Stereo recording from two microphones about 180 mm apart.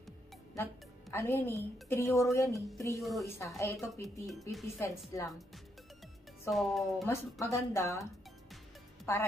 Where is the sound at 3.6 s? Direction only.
15° left (ahead or behind).